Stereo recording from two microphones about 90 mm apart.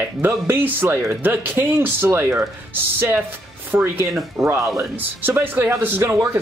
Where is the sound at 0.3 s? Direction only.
25° right (ahead or behind).